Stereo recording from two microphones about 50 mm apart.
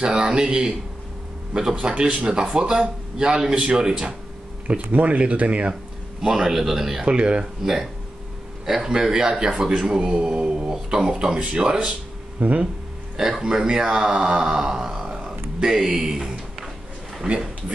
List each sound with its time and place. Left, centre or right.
0.0 s speech: centre
4.9 s speech: right
6.2 s speech: centre
7.1 s speech: right
7.6 s speech: centre
12.4 s speech: right
13.2 s speech: centre